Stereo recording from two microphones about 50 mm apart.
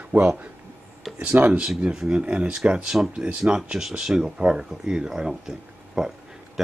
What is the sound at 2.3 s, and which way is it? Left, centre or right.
Speech, right.